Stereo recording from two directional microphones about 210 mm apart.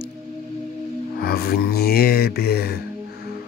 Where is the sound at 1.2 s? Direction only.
45° left (ahead or behind).